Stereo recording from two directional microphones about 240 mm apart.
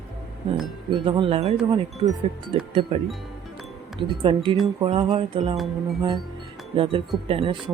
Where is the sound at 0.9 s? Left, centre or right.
Centre.